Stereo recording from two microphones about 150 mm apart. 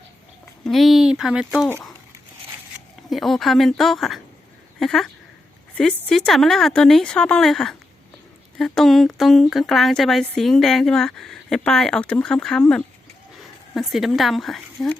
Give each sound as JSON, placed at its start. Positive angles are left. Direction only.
{"t": 0.6, "sound": "speech", "side_deg": 0}
{"t": 3.1, "sound": "speech", "side_deg": 0}